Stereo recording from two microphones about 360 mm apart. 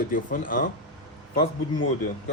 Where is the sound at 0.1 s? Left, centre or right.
Left.